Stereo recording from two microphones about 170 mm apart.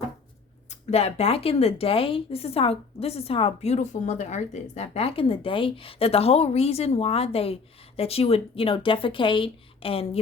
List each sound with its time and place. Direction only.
0.7 s speech: 40° left (ahead or behind)